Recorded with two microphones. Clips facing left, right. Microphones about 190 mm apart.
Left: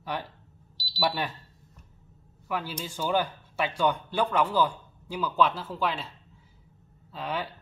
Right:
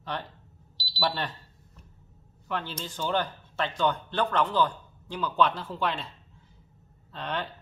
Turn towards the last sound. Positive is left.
turn(degrees=5)  # may be behind; listen again after turning